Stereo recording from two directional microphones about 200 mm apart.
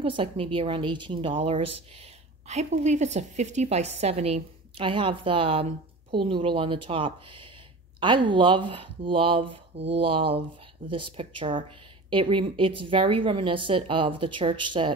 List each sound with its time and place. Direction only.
0.0 s a woman's voice: 25° right (ahead or behind)